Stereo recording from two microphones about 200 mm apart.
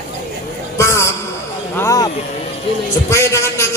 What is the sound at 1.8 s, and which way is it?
Music, 15° left (ahead or behind).